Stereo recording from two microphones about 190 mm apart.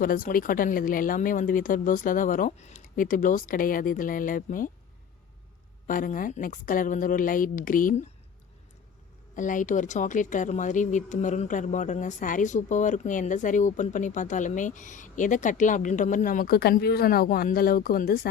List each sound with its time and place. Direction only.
0.0 s speech: 45° left (ahead or behind)
5.9 s speech: 45° left (ahead or behind)
9.3 s speech: 45° left (ahead or behind)